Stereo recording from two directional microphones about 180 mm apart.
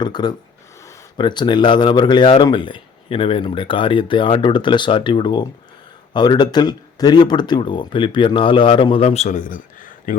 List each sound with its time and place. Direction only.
0.0 s speech: 25° left (ahead or behind); by 10.2 s 45° left (ahead or behind)